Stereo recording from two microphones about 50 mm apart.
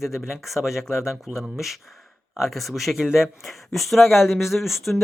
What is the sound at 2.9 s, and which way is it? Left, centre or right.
Speech, centre.